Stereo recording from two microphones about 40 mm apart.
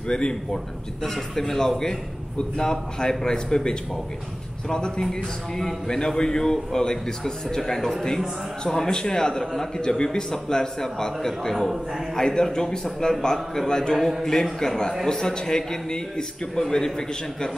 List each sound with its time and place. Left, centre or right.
0.1 s a man's voice: centre